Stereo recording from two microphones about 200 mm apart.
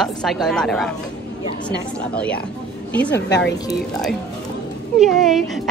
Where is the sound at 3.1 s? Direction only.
60° left (ahead or behind).